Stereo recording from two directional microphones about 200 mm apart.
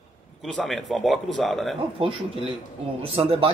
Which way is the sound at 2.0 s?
25° right (ahead or behind).